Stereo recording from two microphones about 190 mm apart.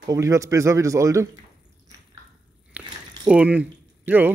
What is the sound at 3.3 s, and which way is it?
Speech, 5° right (ahead or behind).